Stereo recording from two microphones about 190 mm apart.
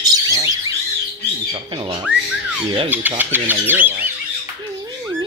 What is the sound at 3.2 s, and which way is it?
Speech, 10° right (ahead or behind).